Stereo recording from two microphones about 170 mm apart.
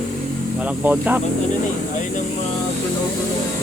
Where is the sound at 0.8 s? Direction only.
10° right (ahead or behind).